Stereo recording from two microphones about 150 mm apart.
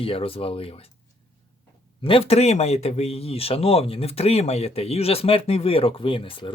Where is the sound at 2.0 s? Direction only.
40° left (ahead or behind).